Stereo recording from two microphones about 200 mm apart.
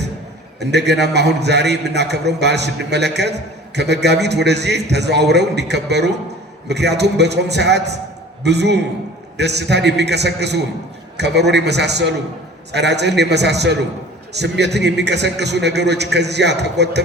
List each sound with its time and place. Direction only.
0.6 s a man's voice: 55° right (ahead or behind)